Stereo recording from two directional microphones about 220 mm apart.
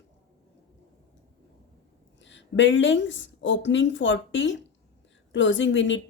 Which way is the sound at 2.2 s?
55° left (ahead or behind).